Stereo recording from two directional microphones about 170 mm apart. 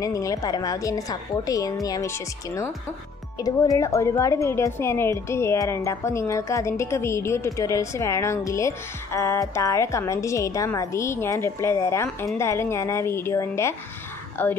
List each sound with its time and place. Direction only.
0.0 s a woman's voice: 20° left (ahead or behind)